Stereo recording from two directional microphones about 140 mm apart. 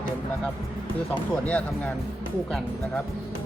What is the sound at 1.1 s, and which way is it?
Speech, 10° left (ahead or behind).